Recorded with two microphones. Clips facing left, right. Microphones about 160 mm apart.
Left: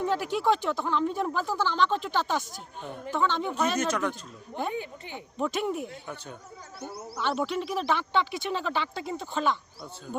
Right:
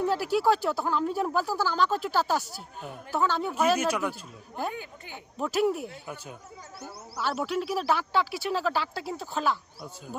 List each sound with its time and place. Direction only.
0.0 s speech: 5° right (ahead or behind)
3.4 s speech: 5° right (ahead or behind)
4.7 s speech: 20° left (ahead or behind)
5.4 s speech: 5° right (ahead or behind)